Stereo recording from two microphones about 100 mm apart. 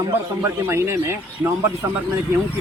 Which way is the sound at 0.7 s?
25° right (ahead or behind).